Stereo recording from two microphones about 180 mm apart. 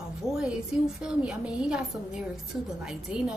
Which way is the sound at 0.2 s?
15° left (ahead or behind).